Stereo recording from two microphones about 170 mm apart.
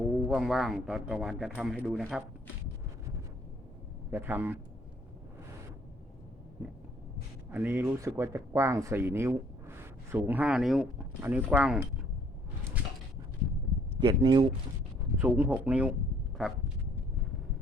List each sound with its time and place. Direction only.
0.3 s a man's voice: centre (ahead or behind)
4.1 s speech: 10° right (ahead or behind)
6.6 s a man's voice: 10° right (ahead or behind)
14.0 s speech: 25° right (ahead or behind)
15.2 s speech: 10° right (ahead or behind)
16.4 s a sound: 5° right (ahead or behind)